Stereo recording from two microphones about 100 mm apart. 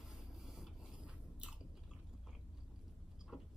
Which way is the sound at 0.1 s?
5° right (ahead or behind).